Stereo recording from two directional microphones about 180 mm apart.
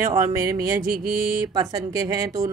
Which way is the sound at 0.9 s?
55° right (ahead or behind).